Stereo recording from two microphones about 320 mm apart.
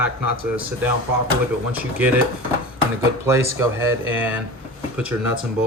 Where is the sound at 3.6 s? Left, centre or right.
Centre.